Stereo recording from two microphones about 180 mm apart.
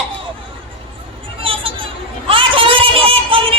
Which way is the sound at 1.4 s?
30° right (ahead or behind).